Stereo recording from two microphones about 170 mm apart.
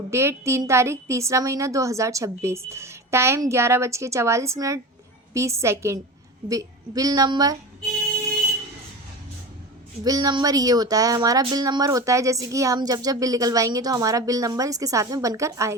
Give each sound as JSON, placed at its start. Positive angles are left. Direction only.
{"t": 0.1, "sound": "a woman's voice", "side_deg": -15}
{"t": 10.0, "sound": "speech", "side_deg": -20}